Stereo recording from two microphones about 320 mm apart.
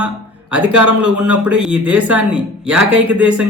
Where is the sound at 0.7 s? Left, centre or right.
Right.